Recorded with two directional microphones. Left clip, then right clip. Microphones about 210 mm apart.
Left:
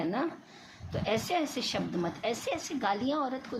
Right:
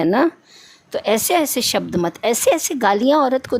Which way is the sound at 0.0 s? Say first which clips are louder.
Right 16 dB; 50° right (ahead or behind).